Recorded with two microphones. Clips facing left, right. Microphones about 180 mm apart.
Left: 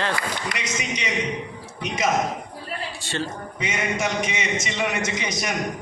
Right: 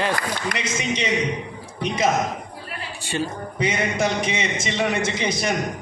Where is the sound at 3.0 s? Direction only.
15° right (ahead or behind).